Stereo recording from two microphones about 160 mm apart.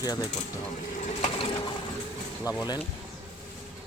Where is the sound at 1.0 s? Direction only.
45° left (ahead or behind).